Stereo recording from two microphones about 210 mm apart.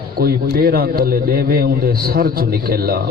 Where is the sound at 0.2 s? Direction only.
45° right (ahead or behind).